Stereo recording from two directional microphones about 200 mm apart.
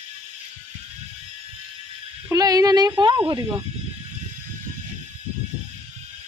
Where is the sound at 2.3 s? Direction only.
20° right (ahead or behind).